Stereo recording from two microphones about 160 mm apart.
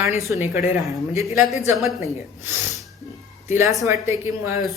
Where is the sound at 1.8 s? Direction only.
Centre (ahead or behind).